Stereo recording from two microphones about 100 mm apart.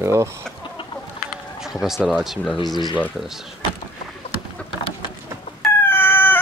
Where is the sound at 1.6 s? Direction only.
5° right (ahead or behind).